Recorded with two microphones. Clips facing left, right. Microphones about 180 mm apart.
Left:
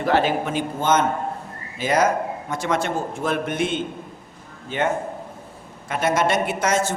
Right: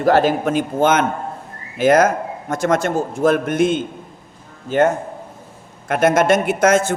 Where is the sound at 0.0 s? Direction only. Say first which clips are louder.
Right 5 dB; 40° right (ahead or behind).